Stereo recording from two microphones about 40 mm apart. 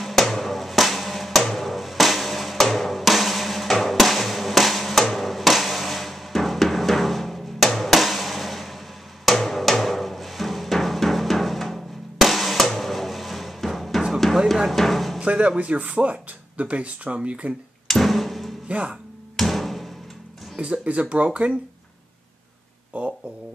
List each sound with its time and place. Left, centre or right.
0.0 s music: centre
14.7 s a sound: centre
15.1 s speech: right
17.8 s a sound: centre
18.7 s speech: right
19.3 s music: centre
20.5 s speech: right
22.9 s speech: right